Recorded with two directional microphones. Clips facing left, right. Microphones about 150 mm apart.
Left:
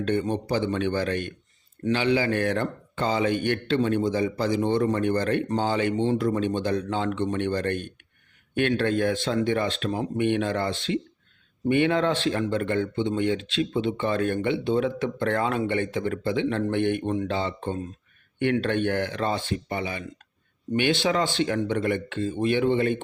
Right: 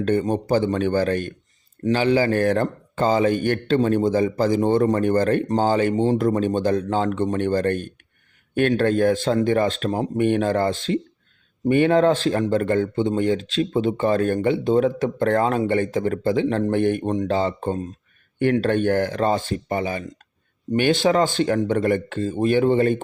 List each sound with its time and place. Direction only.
0.0 s speech: 45° right (ahead or behind)